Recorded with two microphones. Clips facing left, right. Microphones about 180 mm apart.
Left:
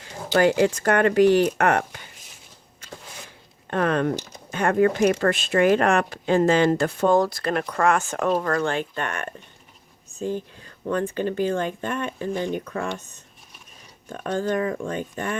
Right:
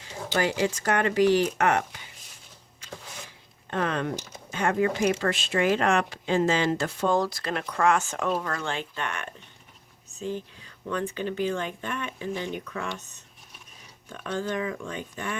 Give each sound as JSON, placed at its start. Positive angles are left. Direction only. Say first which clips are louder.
{"t": 0.3, "sound": "speech", "louder": "left 7 dB", "side_deg": 55}
{"t": 3.7, "sound": "speech", "louder": "left 6 dB", "side_deg": 55}